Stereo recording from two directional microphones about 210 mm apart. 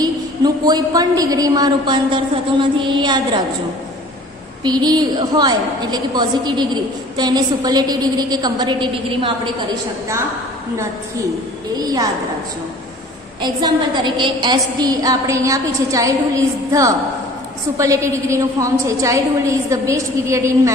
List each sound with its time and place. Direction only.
0.0 s a woman's voice: 20° right (ahead or behind)
4.6 s a woman's voice: 20° right (ahead or behind)
11.7 s a woman's voice: 20° right (ahead or behind)
13.4 s a woman's voice: 20° right (ahead or behind)
17.7 s a woman's voice: 15° right (ahead or behind)